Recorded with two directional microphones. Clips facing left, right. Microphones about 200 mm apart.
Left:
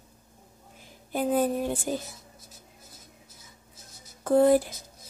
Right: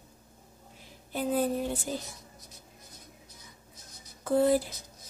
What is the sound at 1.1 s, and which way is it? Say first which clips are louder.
Speech: left 3 dB; 50° left (ahead or behind).